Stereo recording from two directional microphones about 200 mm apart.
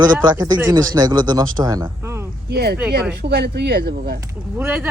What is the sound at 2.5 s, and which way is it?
Speech, 50° right (ahead or behind).